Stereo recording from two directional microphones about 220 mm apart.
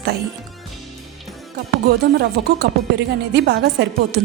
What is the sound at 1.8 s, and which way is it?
A woman's voice, 50° right (ahead or behind).